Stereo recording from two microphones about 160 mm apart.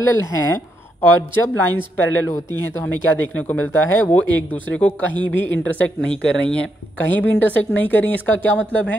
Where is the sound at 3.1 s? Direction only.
10° left (ahead or behind).